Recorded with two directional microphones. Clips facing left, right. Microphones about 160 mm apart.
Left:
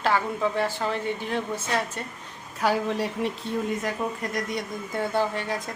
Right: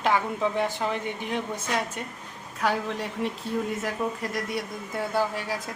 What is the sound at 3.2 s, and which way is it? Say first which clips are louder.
Speech: left 1 dB; 5° left (ahead or behind).